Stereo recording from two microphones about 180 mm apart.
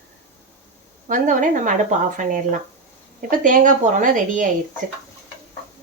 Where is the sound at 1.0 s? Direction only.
45° right (ahead or behind).